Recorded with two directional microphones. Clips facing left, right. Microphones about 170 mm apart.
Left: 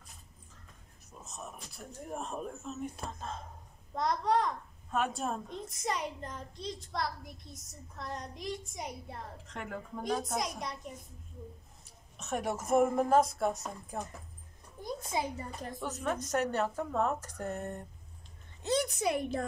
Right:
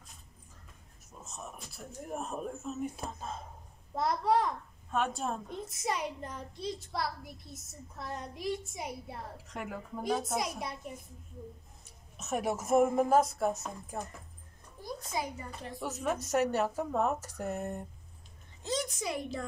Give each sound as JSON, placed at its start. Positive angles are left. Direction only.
{"t": 1.2, "sound": "a child's voice", "side_deg": 0}
{"t": 12.2, "sound": "a child's voice", "side_deg": -5}
{"t": 14.8, "sound": "a sound", "side_deg": 25}
{"t": 15.8, "sound": "speech", "side_deg": -10}
{"t": 18.6, "sound": "a woman's voice", "side_deg": 60}